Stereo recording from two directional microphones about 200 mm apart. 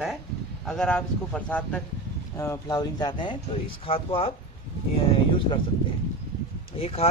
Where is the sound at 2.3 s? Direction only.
15° left (ahead or behind).